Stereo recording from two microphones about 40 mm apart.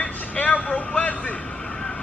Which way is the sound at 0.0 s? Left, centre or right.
Left.